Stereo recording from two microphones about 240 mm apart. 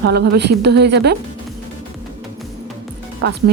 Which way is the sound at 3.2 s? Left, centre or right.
Right.